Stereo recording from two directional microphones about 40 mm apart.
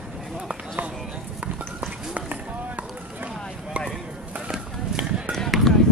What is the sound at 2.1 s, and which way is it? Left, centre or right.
Chop, right.